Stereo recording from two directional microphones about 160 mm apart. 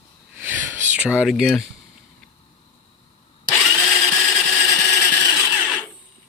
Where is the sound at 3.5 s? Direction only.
5° left (ahead or behind).